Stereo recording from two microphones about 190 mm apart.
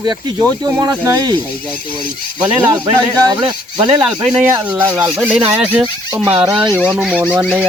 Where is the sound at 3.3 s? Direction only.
25° right (ahead or behind).